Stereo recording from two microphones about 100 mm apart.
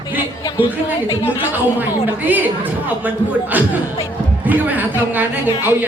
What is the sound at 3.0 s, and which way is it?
A woman's voice, 15° right (ahead or behind).